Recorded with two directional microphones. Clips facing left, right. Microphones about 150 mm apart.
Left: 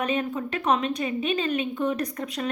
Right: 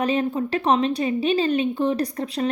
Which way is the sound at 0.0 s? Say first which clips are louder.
Right 5 dB; 30° right (ahead or behind).